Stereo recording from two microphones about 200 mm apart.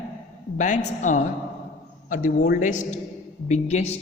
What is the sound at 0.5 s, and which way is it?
A woman's voice, 40° left (ahead or behind).